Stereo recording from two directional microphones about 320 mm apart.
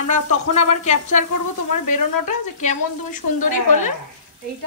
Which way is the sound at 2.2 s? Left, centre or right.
Left.